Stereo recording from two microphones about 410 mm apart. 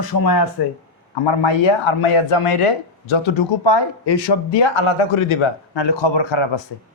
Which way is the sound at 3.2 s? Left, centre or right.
Left.